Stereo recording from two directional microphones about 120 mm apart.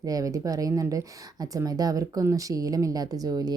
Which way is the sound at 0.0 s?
30° right (ahead or behind).